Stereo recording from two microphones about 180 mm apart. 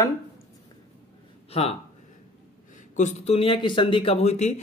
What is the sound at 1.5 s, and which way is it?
Speech, 35° left (ahead or behind).